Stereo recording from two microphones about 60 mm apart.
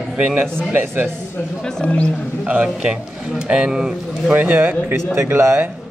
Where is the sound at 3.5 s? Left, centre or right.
Centre.